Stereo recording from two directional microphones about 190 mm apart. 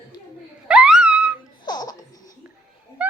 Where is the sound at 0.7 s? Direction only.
5° right (ahead or behind).